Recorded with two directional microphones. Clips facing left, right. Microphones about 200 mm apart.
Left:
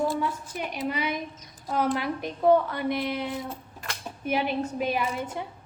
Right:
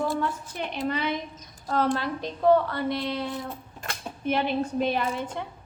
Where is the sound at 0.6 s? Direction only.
10° left (ahead or behind).